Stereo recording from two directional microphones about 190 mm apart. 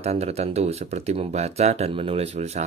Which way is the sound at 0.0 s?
35° right (ahead or behind).